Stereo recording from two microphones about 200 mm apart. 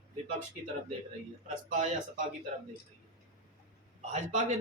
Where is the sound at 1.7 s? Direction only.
40° right (ahead or behind).